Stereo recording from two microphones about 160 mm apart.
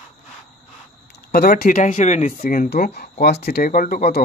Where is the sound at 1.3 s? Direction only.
70° left (ahead or behind).